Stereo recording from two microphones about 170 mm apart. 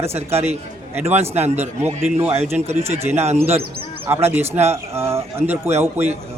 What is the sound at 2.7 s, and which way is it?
Speech, 40° right (ahead or behind).